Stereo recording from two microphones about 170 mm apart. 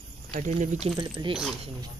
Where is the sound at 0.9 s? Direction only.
25° right (ahead or behind).